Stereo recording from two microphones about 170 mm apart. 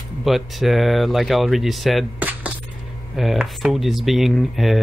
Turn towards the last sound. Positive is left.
turn(degrees=0)  # may be behind; listen again after turning